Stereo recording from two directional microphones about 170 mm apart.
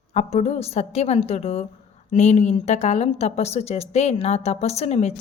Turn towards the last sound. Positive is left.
turn(degrees=40)  # may be behind; listen again after turning